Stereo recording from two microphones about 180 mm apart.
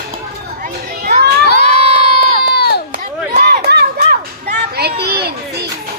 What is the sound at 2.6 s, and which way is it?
Chop, 65° left (ahead or behind).